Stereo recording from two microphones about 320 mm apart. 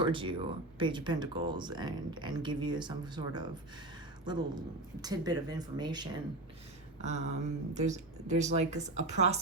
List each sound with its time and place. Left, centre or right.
0.0 s speech: centre